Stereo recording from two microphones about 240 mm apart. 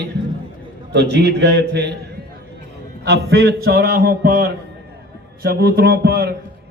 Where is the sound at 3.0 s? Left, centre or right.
Right.